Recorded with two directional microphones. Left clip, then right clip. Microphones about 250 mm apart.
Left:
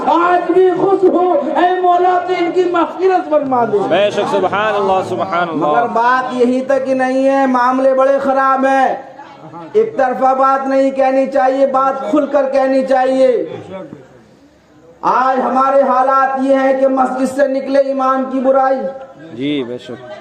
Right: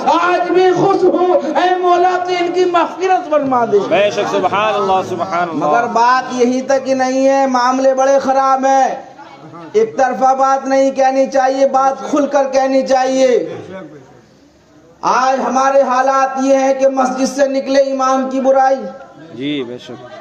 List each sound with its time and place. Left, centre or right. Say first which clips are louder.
0.0 s a sound: left 1 dB; right
1.5 s a man's voice: left 2 dB; right
3.8 s a man's voice: even; left
5.7 s a man's voice: right 2 dB; right
15.0 s a man's voice: even; right
19.4 s a man's voice: left 2 dB; left